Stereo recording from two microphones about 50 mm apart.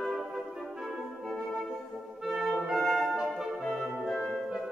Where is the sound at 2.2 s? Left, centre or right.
Centre.